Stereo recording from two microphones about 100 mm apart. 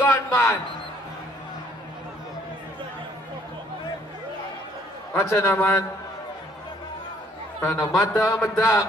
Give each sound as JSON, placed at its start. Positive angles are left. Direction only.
{"t": 0.0, "sound": "a man's voice", "side_deg": 20}
{"t": 5.1, "sound": "a man's voice", "side_deg": 30}
{"t": 7.6, "sound": "speech", "side_deg": 30}